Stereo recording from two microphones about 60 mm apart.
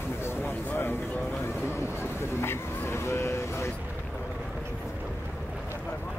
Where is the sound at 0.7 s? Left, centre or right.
Left.